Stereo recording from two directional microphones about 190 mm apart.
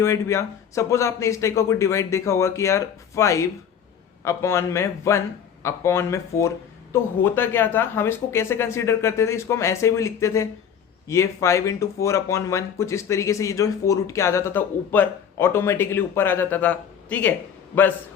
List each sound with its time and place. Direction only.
0.0 s speech: 15° left (ahead or behind)